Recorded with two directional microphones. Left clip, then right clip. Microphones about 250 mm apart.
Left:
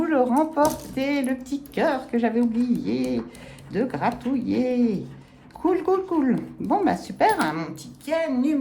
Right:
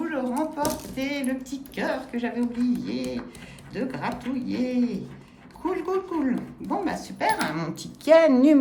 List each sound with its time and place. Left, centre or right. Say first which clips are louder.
0.0 s coin: left 7 dB; centre
0.7 s speech: left 4 dB; centre
7.4 s speech: left 3 dB; centre
8.0 s a sound: right 8 dB; centre